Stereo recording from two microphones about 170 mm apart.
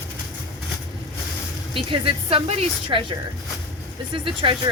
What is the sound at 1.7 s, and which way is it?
Speech, 30° right (ahead or behind).